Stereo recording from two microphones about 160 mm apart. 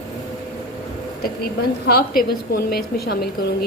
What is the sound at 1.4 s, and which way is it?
A woman's voice, 75° left (ahead or behind).